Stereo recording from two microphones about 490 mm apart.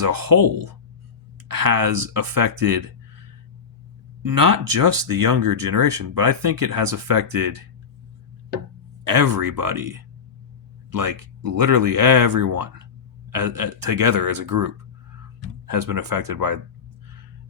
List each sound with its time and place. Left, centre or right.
0.0 s speech: right
4.2 s speech: right
9.0 s speech: right
15.7 s speech: right